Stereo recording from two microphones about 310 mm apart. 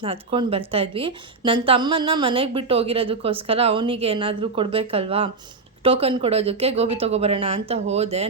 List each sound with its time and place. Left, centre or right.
0.0 s a woman's voice: centre